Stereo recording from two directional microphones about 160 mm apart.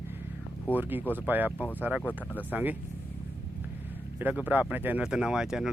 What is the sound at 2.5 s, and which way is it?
Speech, 10° right (ahead or behind).